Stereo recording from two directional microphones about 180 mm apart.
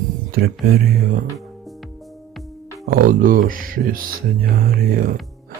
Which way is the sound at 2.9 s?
50° right (ahead or behind).